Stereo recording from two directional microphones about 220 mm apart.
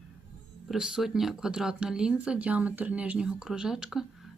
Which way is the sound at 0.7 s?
Centre (ahead or behind).